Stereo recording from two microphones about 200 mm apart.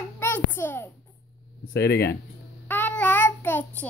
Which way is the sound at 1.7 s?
55° left (ahead or behind).